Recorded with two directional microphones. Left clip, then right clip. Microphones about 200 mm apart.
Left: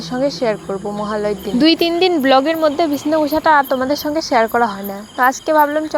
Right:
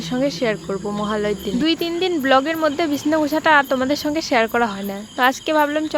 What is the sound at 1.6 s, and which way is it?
Speech, 25° left (ahead or behind).